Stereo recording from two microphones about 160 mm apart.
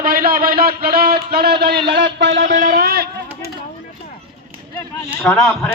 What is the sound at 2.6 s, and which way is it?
Speech, 70° right (ahead or behind).